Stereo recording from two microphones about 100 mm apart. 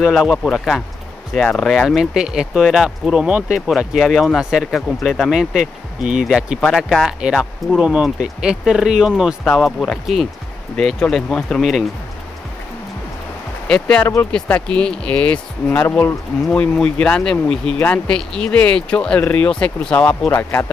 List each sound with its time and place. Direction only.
0.0 s speech: 5° right (ahead or behind)
7.1 s speech: 5° right (ahead or behind)
13.7 s speech: 10° left (ahead or behind)
20.2 s speech: 25° left (ahead or behind)